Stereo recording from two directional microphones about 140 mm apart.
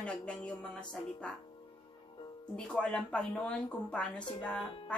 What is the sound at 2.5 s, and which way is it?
Speech, 10° left (ahead or behind).